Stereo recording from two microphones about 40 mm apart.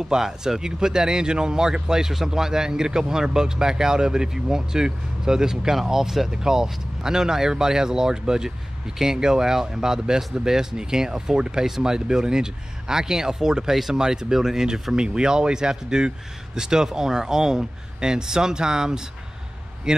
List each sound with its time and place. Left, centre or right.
0.2 s speech: centre